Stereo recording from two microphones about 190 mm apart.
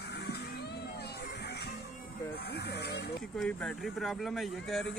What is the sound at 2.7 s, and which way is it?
Snake, 65° left (ahead or behind).